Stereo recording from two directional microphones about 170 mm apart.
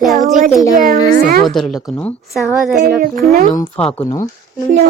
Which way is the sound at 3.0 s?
55° right (ahead or behind).